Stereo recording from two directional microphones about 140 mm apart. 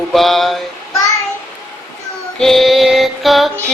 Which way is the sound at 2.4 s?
Centre (ahead or behind).